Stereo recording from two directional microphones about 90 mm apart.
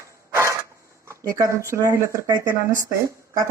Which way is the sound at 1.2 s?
35° right (ahead or behind).